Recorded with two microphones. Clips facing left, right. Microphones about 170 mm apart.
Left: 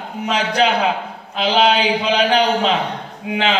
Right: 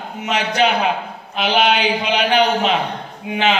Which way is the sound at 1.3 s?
30° left (ahead or behind).